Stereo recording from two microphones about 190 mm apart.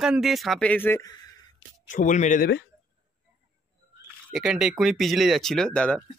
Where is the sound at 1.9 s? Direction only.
40° left (ahead or behind).